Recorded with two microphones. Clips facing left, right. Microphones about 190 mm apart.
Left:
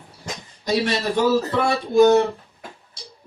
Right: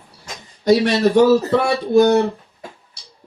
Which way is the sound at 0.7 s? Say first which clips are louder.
Right 7 dB; 65° right (ahead or behind).